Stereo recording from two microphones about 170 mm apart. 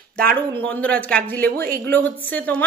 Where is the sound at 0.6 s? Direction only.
10° left (ahead or behind).